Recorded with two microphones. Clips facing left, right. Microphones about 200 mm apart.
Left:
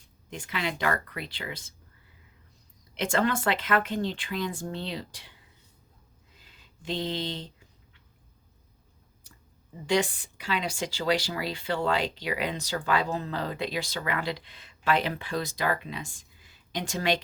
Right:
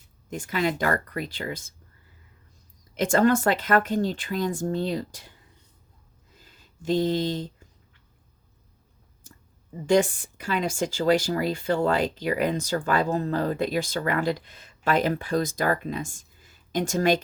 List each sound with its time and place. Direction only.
0.3 s speech: 45° right (ahead or behind)
2.9 s speech: 45° right (ahead or behind)
6.4 s speech: 45° right (ahead or behind)
9.8 s speech: 50° right (ahead or behind)